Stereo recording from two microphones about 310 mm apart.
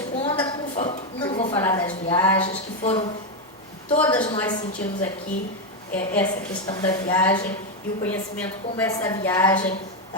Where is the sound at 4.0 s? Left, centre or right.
Centre.